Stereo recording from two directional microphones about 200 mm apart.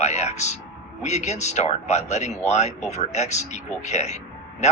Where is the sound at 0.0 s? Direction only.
35° left (ahead or behind).